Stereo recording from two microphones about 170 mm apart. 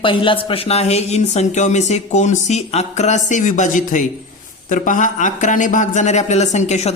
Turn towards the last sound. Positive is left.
turn(degrees=40)  # may be behind; listen again after turning